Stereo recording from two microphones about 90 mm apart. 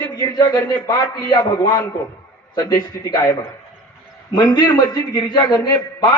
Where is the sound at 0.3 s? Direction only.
45° left (ahead or behind).